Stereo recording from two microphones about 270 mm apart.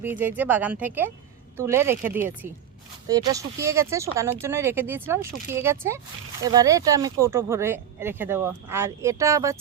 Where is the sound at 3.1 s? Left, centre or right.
Centre.